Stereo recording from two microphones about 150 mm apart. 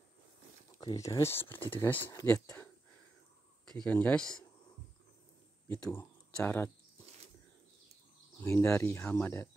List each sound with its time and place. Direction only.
0.7 s speech: 25° left (ahead or behind)
3.6 s speech: 5° left (ahead or behind)
5.7 s speech: 15° left (ahead or behind)
8.4 s speech: 15° left (ahead or behind)